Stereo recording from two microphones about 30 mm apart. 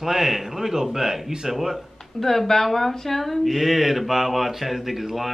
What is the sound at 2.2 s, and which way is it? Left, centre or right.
Speech, centre.